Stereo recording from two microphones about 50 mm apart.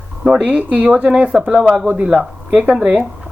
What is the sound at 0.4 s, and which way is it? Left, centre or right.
Speech, right.